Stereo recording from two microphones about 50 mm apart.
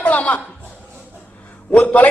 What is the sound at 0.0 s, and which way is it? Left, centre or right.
Chuckle, left.